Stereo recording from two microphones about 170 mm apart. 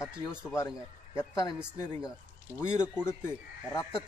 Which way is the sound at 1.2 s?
20° left (ahead or behind).